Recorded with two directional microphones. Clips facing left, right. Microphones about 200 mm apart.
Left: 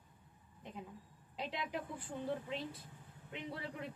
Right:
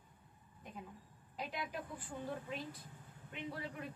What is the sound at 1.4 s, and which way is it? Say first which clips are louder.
A woman's voice: left 2 dB; 25° left (ahead or behind).